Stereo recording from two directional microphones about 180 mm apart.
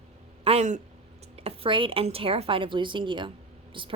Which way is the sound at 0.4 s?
40° right (ahead or behind).